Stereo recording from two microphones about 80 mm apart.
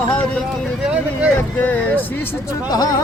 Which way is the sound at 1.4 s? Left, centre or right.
Left.